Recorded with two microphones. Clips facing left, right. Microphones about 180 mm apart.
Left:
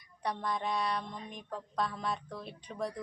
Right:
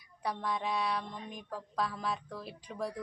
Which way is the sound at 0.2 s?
5° right (ahead or behind).